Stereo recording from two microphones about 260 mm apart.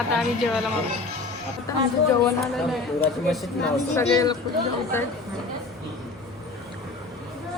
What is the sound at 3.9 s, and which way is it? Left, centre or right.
A woman's voice, centre.